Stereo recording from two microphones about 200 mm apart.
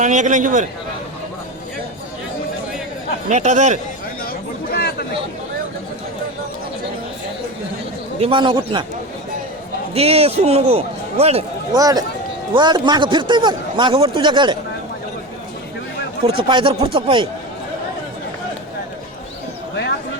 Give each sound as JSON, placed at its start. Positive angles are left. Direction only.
{"t": 0.0, "sound": "a man's voice", "side_deg": -40}
{"t": 3.2, "sound": "a man's voice", "side_deg": -35}
{"t": 4.3, "sound": "chatter", "side_deg": 55}
{"t": 8.2, "sound": "a man's voice", "side_deg": -25}
{"t": 9.9, "sound": "a man's voice", "side_deg": -30}
{"t": 11.7, "sound": "a man's voice", "side_deg": -20}
{"t": 16.2, "sound": "a man's voice", "side_deg": -25}